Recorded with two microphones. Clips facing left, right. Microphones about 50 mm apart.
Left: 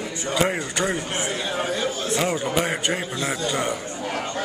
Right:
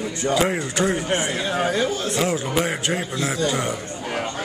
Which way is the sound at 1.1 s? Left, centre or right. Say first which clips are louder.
Right 3 dB; right.